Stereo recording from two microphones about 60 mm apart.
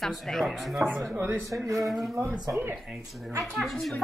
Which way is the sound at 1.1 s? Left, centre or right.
Right.